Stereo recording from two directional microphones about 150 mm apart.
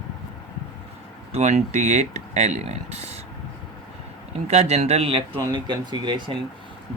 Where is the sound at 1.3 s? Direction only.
50° right (ahead or behind).